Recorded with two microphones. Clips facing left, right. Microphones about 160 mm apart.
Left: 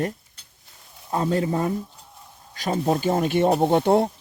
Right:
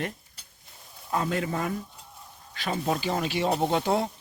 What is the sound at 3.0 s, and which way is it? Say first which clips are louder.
Speech: left 7 dB; 50° left (ahead or behind).